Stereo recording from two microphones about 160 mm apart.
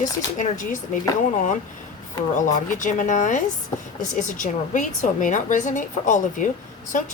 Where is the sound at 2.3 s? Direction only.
50° left (ahead or behind).